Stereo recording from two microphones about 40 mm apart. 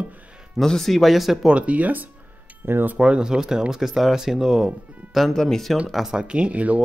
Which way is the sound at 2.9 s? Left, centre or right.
Right.